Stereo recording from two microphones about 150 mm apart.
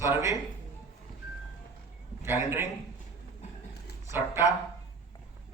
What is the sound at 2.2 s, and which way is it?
Speech, 15° right (ahead or behind).